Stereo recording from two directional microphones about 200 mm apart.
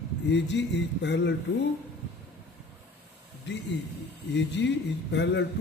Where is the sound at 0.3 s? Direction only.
60° left (ahead or behind).